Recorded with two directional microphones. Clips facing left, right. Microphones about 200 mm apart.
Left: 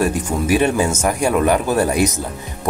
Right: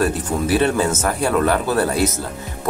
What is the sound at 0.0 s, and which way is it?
Speech, 15° left (ahead or behind).